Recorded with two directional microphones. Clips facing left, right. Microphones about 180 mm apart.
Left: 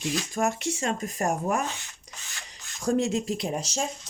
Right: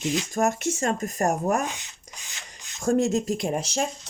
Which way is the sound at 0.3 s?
45° right (ahead or behind).